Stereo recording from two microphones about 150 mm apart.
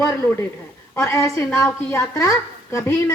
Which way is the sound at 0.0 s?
15° left (ahead or behind).